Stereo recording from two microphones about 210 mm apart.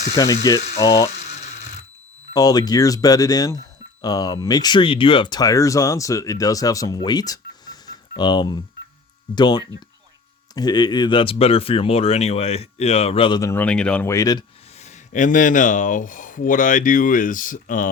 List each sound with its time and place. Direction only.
0.1 s speech: 15° left (ahead or behind)
1.1 s a sound: 30° left (ahead or behind)
2.3 s speech: 20° left (ahead or behind)
14.8 s speech: 35° left (ahead or behind)